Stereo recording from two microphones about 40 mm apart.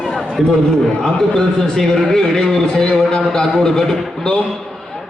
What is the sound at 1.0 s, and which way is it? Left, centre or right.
A man's voice, centre.